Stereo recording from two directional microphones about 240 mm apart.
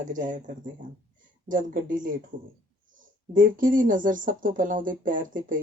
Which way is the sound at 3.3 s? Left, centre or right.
Right.